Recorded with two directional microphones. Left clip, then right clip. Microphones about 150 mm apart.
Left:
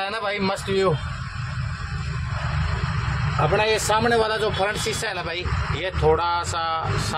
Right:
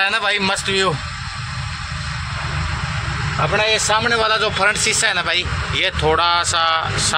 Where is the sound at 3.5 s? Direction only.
30° left (ahead or behind).